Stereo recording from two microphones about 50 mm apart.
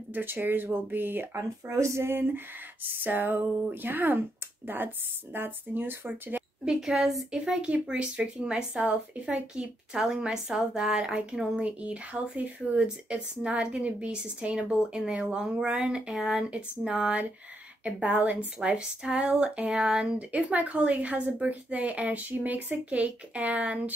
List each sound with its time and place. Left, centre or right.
0.1 s speech: right
1.7 s a sound: right
2.0 s speech: right
3.0 s a sound: right
4.7 s speech: right
6.6 s a woman's voice: centre
7.4 s a woman's voice: right
11.6 s speech: right
18.0 s a woman's voice: right; by 20.2 s centre
20.2 s speech: right